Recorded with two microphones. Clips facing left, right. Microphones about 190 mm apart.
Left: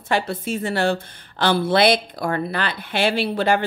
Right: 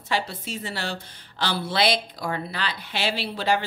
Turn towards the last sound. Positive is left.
turn(degrees=55)  # may be behind; listen again after turning